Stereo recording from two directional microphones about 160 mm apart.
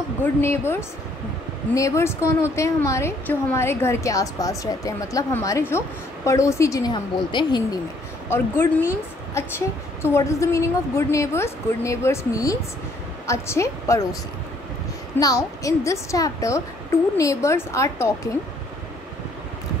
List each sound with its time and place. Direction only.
0.2 s a woman's voice: 15° left (ahead or behind)
8.3 s a woman's voice: 15° left (ahead or behind)
15.1 s a woman's voice: 20° left (ahead or behind)